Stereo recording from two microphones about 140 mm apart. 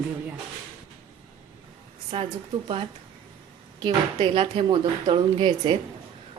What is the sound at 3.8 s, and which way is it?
A woman's voice, 40° right (ahead or behind).